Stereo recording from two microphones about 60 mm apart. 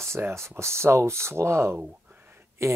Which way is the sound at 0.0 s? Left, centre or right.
Right.